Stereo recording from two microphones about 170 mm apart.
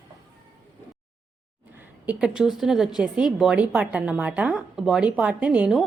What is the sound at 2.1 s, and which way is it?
A woman's voice, 5° right (ahead or behind).